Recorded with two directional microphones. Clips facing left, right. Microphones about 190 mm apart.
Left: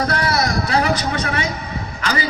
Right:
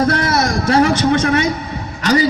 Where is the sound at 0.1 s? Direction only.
45° right (ahead or behind).